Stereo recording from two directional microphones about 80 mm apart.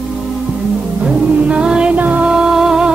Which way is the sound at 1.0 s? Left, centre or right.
Centre.